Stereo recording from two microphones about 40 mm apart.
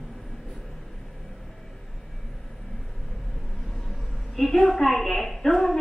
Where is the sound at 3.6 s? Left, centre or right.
Centre.